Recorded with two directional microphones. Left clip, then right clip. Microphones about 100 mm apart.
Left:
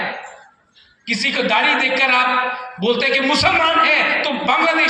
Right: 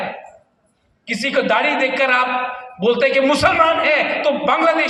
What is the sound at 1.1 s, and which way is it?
A man's voice, 35° right (ahead or behind).